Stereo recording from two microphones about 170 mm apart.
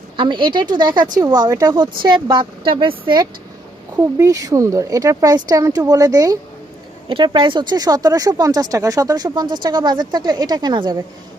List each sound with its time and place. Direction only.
0.2 s speech: 30° right (ahead or behind)
3.9 s speech: 20° right (ahead or behind)